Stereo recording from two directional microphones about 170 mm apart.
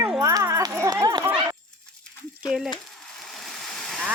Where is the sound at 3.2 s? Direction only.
Centre (ahead or behind).